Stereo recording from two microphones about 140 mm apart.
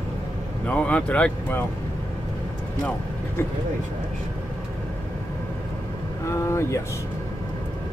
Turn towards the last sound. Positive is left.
turn(degrees=20)  # may be behind; listen again after turning